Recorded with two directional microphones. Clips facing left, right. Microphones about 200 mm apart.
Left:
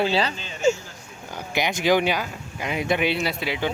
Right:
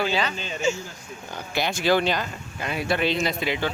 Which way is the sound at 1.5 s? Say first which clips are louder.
Left 1 dB; 15° left (ahead or behind).